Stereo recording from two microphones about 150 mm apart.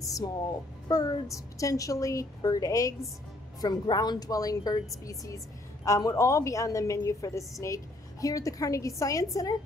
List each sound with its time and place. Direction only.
0.0 s music: 25° left (ahead or behind)
0.8 s a woman's voice: 25° left (ahead or behind)